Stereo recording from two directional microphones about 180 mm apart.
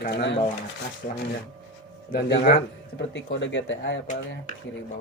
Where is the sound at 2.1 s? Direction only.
60° left (ahead or behind).